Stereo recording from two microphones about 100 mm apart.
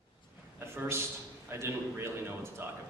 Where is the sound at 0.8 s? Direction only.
25° right (ahead or behind).